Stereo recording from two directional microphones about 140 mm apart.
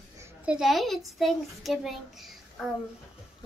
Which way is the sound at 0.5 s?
Centre (ahead or behind).